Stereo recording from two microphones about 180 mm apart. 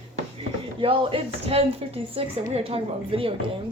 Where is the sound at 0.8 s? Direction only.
30° right (ahead or behind).